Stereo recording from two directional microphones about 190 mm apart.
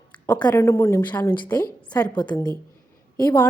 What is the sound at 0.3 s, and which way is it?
Speech, 20° left (ahead or behind).